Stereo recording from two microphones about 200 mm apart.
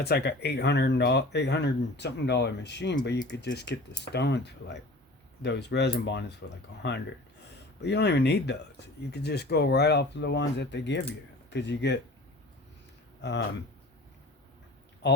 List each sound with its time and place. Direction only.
0.0 s speech: 55° left (ahead or behind)
15.0 s speech: 60° left (ahead or behind)